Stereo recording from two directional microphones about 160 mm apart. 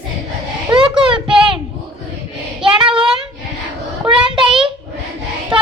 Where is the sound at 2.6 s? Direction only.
35° right (ahead or behind).